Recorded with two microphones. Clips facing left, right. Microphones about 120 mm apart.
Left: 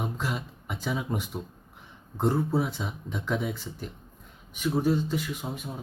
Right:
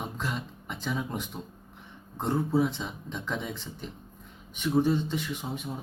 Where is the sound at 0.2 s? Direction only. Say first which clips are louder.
Left 1 dB; 5° left (ahead or behind).